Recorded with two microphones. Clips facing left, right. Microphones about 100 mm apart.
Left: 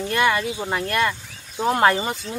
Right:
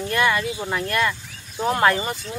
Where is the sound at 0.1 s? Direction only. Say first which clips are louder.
Even; 20° left (ahead or behind).